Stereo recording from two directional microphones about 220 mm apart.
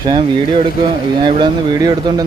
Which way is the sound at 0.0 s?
20° right (ahead or behind).